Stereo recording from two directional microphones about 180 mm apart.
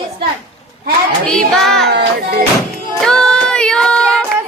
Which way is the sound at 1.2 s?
5° left (ahead or behind).